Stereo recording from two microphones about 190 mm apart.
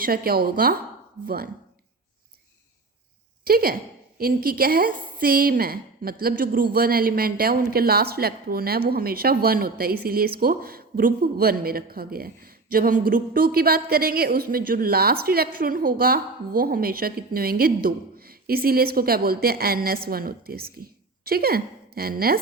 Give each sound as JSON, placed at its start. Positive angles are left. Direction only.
{"t": 0.0, "sound": "a woman's voice", "side_deg": -50}
{"t": 3.4, "sound": "a woman's voice", "side_deg": -50}